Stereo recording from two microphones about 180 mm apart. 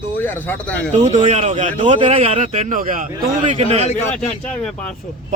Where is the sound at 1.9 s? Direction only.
30° right (ahead or behind).